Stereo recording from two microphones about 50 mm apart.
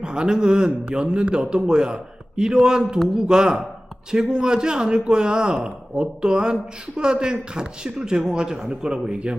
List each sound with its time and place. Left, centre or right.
0.0 s speech: centre